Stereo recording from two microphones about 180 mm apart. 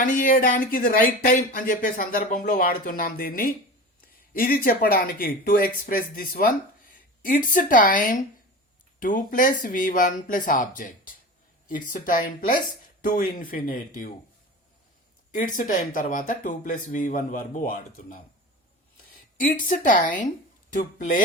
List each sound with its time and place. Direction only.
0.0 s speech: 45° left (ahead or behind)
15.3 s speech: 50° left (ahead or behind)
19.5 s speech: 50° left (ahead or behind)